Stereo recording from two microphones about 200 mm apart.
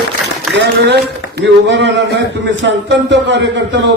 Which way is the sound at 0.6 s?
55° right (ahead or behind).